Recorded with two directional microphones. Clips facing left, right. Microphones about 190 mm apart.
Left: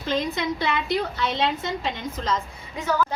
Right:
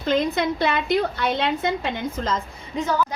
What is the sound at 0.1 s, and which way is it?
A woman's voice, 55° right (ahead or behind).